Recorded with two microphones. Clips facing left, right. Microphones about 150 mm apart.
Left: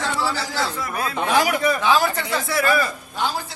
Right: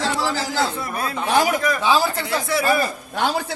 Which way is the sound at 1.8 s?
5° right (ahead or behind).